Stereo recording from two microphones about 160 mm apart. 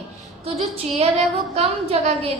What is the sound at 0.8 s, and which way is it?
A woman's voice, 40° right (ahead or behind).